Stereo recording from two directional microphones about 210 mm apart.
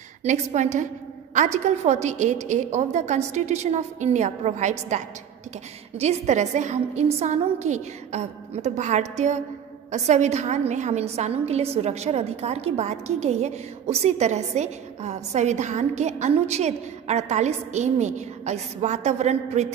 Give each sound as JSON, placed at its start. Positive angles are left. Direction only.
{"t": 0.2, "sound": "a woman's voice", "side_deg": -35}